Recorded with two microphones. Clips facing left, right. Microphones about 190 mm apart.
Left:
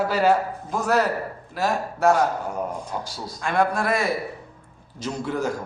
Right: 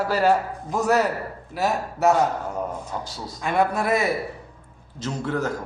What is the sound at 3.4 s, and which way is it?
Speech, 5° right (ahead or behind).